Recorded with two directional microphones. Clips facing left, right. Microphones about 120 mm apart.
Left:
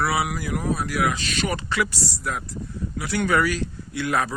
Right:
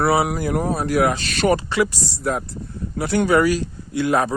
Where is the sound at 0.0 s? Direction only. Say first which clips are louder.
Right 6 dB; 30° right (ahead or behind).